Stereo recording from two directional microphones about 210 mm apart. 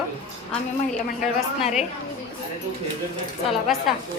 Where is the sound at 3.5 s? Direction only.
Centre (ahead or behind).